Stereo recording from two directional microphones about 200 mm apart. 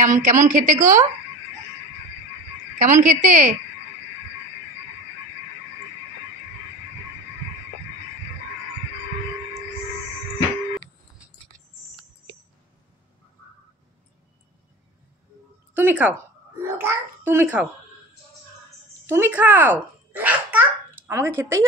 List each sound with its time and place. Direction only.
0.0 s a woman's voice: 40° right (ahead or behind)
2.8 s a woman's voice: 35° right (ahead or behind)
15.7 s a child's voice: 10° right (ahead or behind)
19.0 s a child's voice: 10° right (ahead or behind)